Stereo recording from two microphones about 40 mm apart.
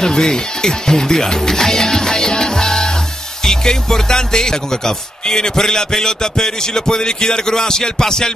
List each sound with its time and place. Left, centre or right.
0.0 s a man's voice: centre